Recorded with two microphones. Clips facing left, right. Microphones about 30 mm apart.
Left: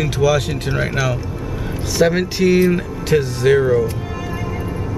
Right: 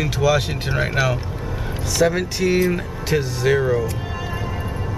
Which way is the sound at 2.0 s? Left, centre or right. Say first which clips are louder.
Left 3 dB; left.